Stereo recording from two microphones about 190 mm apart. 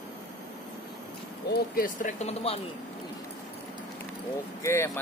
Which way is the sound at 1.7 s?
45° left (ahead or behind).